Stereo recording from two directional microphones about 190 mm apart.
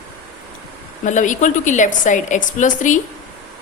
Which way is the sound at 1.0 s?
40° left (ahead or behind).